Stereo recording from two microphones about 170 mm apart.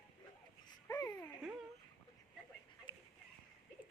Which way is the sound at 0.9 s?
20° left (ahead or behind).